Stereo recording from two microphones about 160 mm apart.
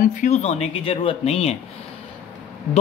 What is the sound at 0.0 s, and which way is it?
Speech, 55° left (ahead or behind).